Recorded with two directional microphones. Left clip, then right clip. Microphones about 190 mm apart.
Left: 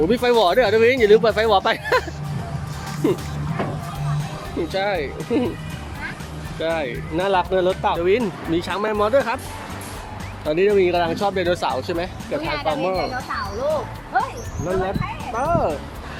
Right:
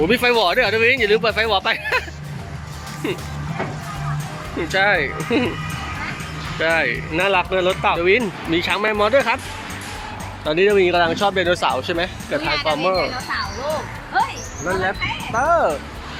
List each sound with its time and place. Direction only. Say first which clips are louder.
0.0 s speech: right 1 dB; 15° left (ahead or behind)
4.7 s speech: right 7 dB; 5° left (ahead or behind)
6.6 s speech: right 5 dB; 5° left (ahead or behind)
7.9 s speech: right 2 dB; centre (ahead or behind)
10.4 s speech: right 2 dB; centre (ahead or behind)
15.4 s speech: right 4 dB; centre (ahead or behind)